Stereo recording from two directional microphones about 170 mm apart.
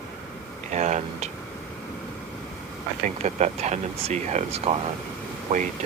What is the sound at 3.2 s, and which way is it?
Speech, 40° right (ahead or behind).